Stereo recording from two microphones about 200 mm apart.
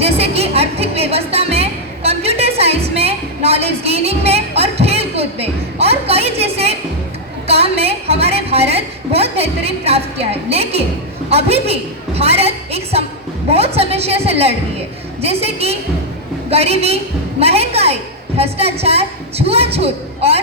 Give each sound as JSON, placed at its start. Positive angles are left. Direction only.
{"t": 0.0, "sound": "music", "side_deg": -30}
{"t": 7.4, "sound": "a sound", "side_deg": -30}
{"t": 15.2, "sound": "a woman's voice", "side_deg": -30}